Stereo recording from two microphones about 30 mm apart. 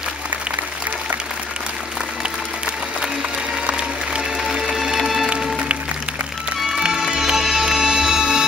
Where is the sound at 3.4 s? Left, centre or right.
Right.